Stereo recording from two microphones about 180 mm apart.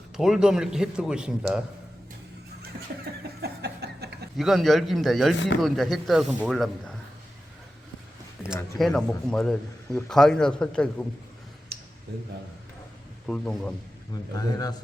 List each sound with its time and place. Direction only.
0.2 s a man's voice: 5° right (ahead or behind)
3.4 s a sound: 65° right (ahead or behind)
4.4 s a man's voice: centre (ahead or behind)
8.8 s a man's voice: 5° left (ahead or behind)
13.2 s a man's voice: 5° left (ahead or behind)
14.3 s a man's voice: 20° left (ahead or behind)